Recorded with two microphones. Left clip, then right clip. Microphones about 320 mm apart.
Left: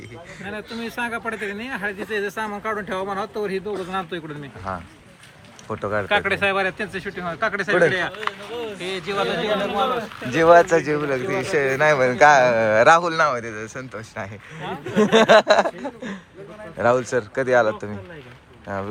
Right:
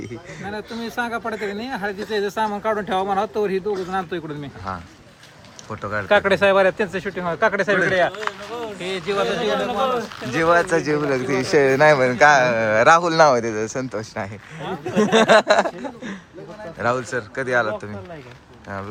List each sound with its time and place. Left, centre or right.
0.4 s speech: centre
5.6 s a man's voice: centre
6.1 s speech: right
8.8 s a man's voice: centre
11.3 s a man's voice: centre